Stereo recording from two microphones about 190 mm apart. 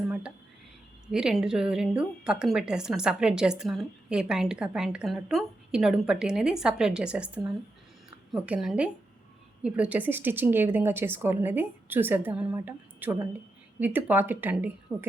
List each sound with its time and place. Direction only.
0.1 s whispering: 5° right (ahead or behind)
1.1 s a woman's voice: 5° right (ahead or behind)